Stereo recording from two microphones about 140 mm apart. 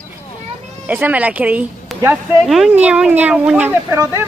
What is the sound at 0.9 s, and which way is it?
Speech, 10° right (ahead or behind).